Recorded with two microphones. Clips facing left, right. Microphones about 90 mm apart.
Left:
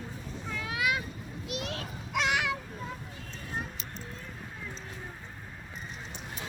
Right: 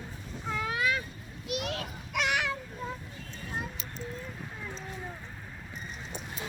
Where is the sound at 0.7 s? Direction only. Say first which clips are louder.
Left 1 dB; 15° left (ahead or behind).